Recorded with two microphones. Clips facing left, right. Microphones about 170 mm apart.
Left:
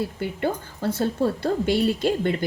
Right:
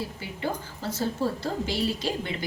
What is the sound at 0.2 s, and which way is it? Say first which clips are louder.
A woman's voice: left 6 dB; 55° left (ahead or behind).